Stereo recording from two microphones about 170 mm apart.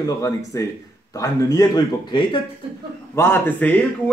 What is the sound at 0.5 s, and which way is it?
Speech, 20° left (ahead or behind).